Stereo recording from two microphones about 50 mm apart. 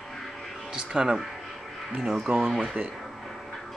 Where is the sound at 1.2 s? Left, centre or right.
Centre.